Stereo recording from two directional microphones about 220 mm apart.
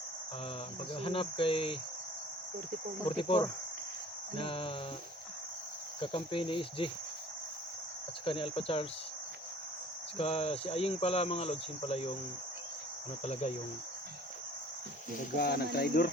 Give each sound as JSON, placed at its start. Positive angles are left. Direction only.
{"t": 0.9, "sound": "cricket", "side_deg": 25}
{"t": 3.1, "sound": "cricket", "side_deg": 25}
{"t": 6.0, "sound": "cricket", "side_deg": 25}
{"t": 8.2, "sound": "cricket", "side_deg": 25}
{"t": 10.2, "sound": "cricket", "side_deg": 25}
{"t": 13.2, "sound": "cricket", "side_deg": 30}
{"t": 15.4, "sound": "speech", "side_deg": 45}